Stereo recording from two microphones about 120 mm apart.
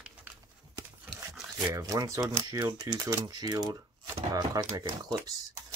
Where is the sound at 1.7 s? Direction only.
25° right (ahead or behind).